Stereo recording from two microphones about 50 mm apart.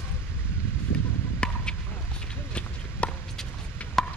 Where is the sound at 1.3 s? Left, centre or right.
Centre.